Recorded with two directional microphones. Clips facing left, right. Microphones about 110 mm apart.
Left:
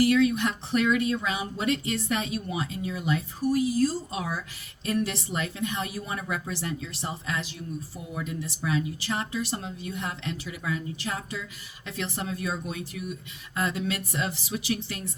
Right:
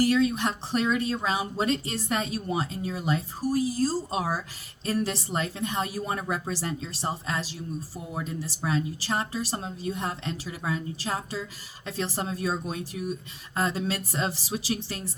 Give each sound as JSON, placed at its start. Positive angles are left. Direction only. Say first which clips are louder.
{"t": 0.0, "sound": "speech", "louder": "left 1 dB", "side_deg": -35}